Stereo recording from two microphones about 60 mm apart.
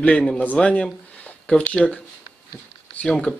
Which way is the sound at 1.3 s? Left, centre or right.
Centre.